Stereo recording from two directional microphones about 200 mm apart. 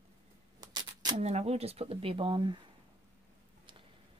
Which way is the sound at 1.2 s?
30° right (ahead or behind).